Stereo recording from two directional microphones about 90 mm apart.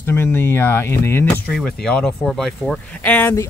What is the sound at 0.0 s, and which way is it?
Speech, 25° left (ahead or behind).